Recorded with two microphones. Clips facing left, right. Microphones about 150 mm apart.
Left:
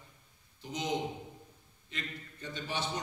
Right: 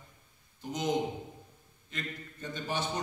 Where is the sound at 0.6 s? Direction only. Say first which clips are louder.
Right 3 dB; 50° right (ahead or behind).